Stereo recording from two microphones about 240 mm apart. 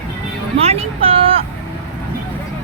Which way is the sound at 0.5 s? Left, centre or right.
Right.